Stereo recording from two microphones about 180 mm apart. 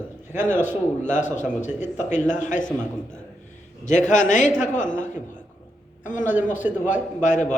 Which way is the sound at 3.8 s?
45° left (ahead or behind).